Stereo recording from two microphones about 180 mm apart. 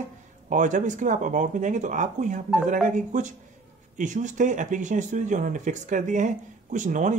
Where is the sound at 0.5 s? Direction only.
45° right (ahead or behind).